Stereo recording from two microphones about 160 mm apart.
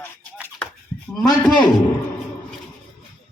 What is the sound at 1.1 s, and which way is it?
Speech, 25° left (ahead or behind).